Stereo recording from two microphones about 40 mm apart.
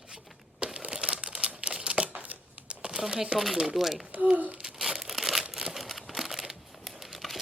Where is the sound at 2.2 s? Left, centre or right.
Right.